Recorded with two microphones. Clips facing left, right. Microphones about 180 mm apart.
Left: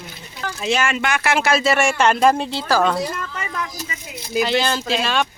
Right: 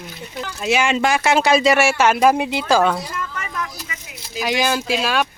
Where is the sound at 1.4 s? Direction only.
15° right (ahead or behind).